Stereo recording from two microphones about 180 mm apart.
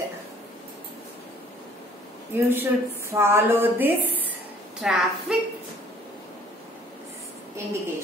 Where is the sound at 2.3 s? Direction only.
10° right (ahead or behind).